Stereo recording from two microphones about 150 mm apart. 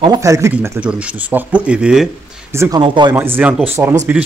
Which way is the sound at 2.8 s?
30° right (ahead or behind).